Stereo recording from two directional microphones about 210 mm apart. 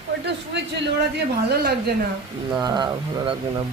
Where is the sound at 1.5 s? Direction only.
50° right (ahead or behind).